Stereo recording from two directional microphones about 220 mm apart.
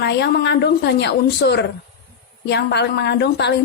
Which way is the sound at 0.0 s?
50° left (ahead or behind).